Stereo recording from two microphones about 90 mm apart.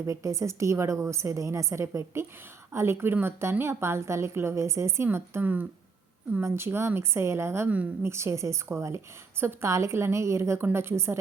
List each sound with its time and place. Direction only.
0.0 s a woman's voice: 35° right (ahead or behind)